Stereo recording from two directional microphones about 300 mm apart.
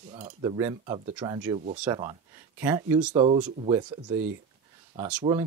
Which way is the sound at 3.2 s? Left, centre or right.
Right.